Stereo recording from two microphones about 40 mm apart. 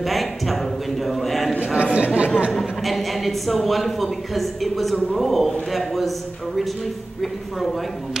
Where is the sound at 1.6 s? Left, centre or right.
Right.